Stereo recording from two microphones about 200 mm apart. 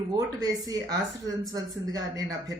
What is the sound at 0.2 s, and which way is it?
A woman's voice, 20° right (ahead or behind).